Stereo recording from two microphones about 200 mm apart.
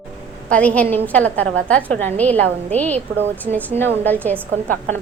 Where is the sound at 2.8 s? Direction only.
35° right (ahead or behind).